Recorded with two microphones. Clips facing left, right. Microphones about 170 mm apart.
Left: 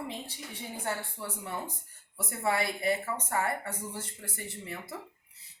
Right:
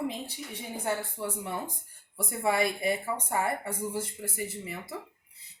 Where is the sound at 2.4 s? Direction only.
15° right (ahead or behind).